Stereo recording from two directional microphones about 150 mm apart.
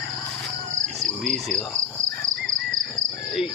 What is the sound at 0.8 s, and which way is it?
Cricket, 5° left (ahead or behind).